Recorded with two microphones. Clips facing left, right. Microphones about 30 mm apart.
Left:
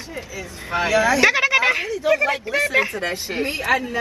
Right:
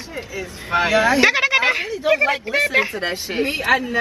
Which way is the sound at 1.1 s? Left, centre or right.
Centre.